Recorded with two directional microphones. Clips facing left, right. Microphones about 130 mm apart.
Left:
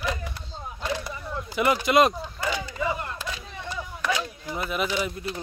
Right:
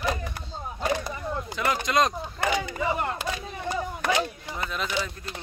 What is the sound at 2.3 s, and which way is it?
Battle cry, 65° right (ahead or behind).